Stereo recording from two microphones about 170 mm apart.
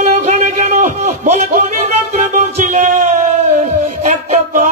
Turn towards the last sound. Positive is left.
turn(degrees=-50)  # may be behind; listen again after turning